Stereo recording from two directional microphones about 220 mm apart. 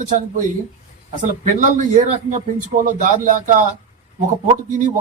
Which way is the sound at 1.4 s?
35° right (ahead or behind).